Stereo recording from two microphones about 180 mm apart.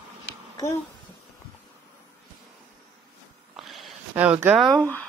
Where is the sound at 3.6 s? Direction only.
Centre (ahead or behind).